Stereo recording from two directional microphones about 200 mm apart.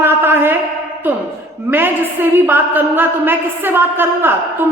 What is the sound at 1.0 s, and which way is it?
A woman's voice, 10° right (ahead or behind).